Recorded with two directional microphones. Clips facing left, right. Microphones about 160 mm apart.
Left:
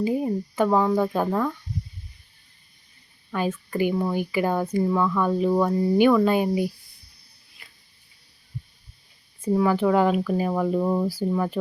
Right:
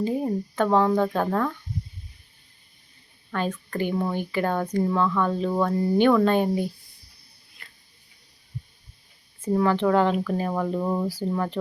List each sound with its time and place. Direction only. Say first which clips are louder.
0.0 s speech: left 1 dB; 10° left (ahead or behind)
3.3 s speech: left 2 dB; 10° left (ahead or behind)
9.4 s speech: left 1 dB; 10° left (ahead or behind)